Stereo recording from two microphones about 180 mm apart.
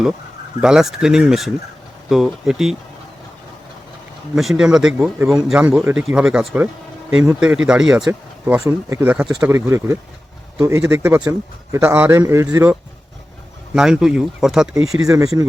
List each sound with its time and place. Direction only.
0.6 s speech: 5° right (ahead or behind)
4.4 s speech: centre (ahead or behind)
8.5 s a man's voice: 15° right (ahead or behind)
13.7 s speech: 5° right (ahead or behind)
15.0 s speech: 20° right (ahead or behind)